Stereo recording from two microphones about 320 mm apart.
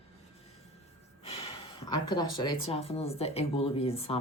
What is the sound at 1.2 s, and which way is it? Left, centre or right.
Gasp, centre.